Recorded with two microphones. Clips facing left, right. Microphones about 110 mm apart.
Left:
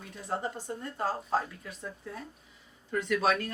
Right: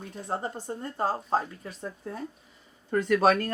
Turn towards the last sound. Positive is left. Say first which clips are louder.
# right 6 dB
turn(degrees=-45)  # may be behind; listen again after turning